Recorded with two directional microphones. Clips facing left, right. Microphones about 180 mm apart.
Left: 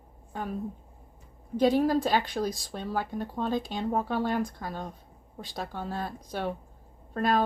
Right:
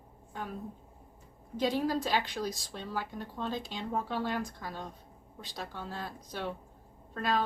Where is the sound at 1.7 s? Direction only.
50° left (ahead or behind).